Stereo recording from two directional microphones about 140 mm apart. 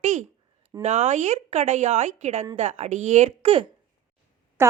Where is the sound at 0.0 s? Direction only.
60° right (ahead or behind).